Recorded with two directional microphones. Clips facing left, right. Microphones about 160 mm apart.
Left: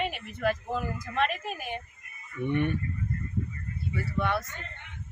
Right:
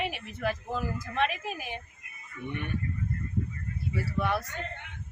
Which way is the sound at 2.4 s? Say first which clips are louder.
Left 8 dB; 60° left (ahead or behind).